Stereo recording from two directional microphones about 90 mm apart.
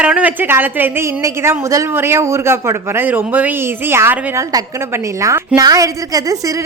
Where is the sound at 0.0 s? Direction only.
15° right (ahead or behind).